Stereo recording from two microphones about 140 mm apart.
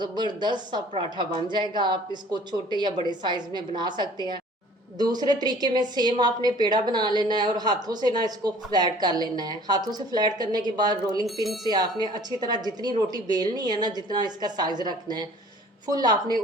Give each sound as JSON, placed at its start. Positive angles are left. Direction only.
{"t": 0.0, "sound": "speech", "side_deg": -30}